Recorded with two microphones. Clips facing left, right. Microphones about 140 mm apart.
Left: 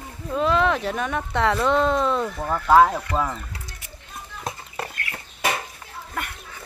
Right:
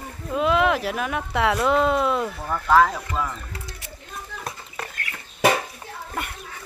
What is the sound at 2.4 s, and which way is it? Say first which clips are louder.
Speech: left 2 dB; 25° left (ahead or behind).